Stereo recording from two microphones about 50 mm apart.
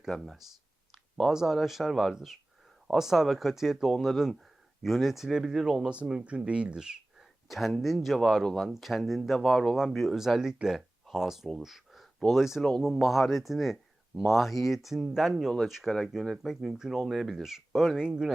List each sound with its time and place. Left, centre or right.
0.1 s speech: centre
1.3 s speech: centre
5.9 s speech: right
6.7 s a sound: centre
7.4 s speech: centre
8.2 s speech: centre
9.7 s speech: centre
11.6 s a sound: centre
12.3 s speech: centre
17.9 s speech: centre